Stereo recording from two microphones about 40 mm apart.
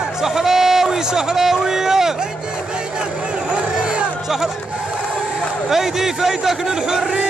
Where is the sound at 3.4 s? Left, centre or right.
Right.